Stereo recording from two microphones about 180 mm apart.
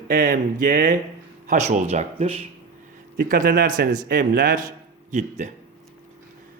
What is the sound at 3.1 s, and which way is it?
Speech, 50° right (ahead or behind).